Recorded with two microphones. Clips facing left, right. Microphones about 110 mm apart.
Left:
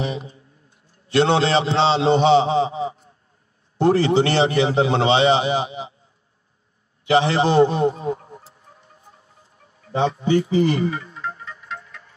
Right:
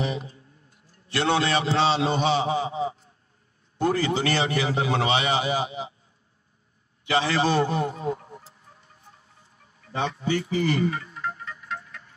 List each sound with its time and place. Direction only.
0.0 s a man's voice: 25° left (ahead or behind)
7.1 s a man's voice: 25° left (ahead or behind)
8.5 s music: 25° left (ahead or behind)